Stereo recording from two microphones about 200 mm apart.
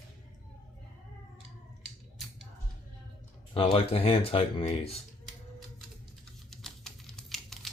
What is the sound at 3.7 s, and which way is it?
Speech, 30° left (ahead or behind).